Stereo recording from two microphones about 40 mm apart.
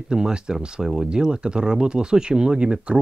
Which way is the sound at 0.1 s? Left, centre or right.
Centre.